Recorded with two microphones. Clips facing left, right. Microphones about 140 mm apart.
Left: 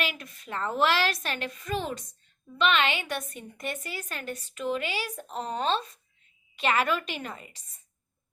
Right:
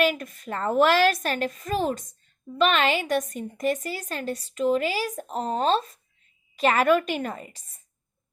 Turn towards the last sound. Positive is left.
turn(degrees=-45)  # may be behind; listen again after turning